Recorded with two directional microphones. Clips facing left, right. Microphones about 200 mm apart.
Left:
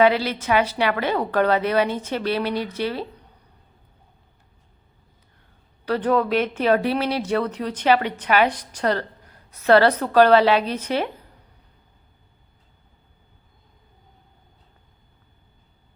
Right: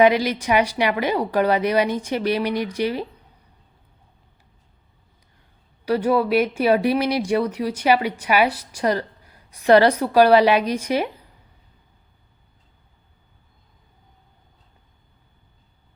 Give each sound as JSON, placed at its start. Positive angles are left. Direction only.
{"t": 0.0, "sound": "speech", "side_deg": -15}
{"t": 5.8, "sound": "speech", "side_deg": -10}